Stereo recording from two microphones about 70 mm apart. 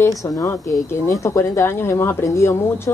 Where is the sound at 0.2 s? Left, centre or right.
Left.